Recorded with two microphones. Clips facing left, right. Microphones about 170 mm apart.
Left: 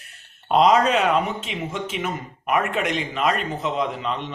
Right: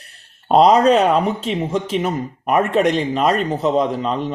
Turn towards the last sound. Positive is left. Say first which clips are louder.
# right 6 dB
turn(degrees=-40)  # may be behind; listen again after turning